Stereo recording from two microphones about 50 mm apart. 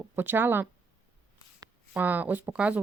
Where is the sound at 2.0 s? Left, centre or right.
Right.